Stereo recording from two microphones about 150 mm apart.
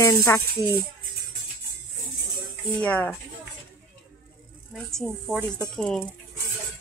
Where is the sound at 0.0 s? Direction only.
20° left (ahead or behind).